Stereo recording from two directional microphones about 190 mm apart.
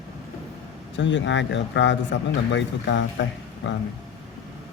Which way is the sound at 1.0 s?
70° left (ahead or behind).